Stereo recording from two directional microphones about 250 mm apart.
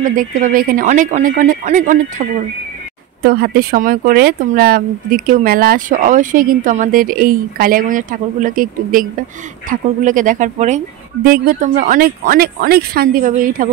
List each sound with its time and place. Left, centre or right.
0.0 s speech: right